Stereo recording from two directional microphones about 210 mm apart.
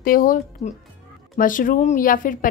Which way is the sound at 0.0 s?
40° left (ahead or behind).